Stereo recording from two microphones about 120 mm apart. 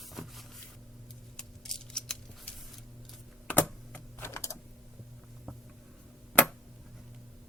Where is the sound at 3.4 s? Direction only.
15° left (ahead or behind).